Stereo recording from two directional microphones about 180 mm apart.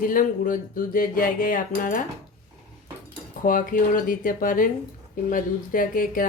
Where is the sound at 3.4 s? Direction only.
50° left (ahead or behind).